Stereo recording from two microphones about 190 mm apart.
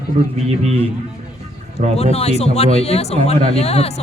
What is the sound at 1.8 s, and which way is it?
Speech, 35° right (ahead or behind).